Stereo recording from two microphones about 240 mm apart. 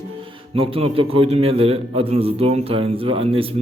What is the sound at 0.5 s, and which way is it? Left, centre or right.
A man's voice, right.